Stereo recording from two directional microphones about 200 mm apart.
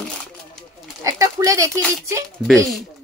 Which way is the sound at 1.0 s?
15° right (ahead or behind).